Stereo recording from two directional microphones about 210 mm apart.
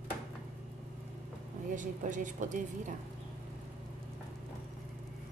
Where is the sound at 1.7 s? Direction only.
35° right (ahead or behind).